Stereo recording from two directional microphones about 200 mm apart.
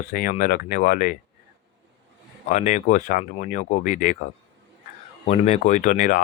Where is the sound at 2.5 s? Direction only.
40° left (ahead or behind).